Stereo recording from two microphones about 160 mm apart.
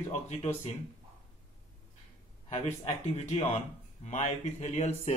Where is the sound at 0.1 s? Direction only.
45° left (ahead or behind).